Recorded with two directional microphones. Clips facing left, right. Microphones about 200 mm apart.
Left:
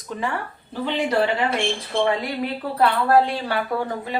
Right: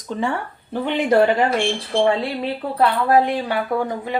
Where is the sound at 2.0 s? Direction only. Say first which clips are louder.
Right 3 dB; 30° right (ahead or behind).